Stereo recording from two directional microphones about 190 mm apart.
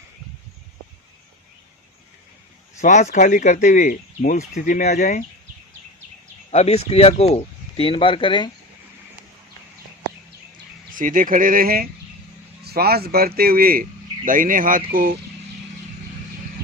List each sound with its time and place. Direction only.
2.8 s speech: 40° left (ahead or behind)
6.5 s speech: 35° left (ahead or behind)
10.9 s speech: 45° right (ahead or behind)